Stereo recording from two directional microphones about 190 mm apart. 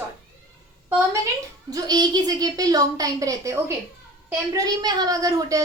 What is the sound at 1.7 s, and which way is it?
A woman's voice, 20° right (ahead or behind).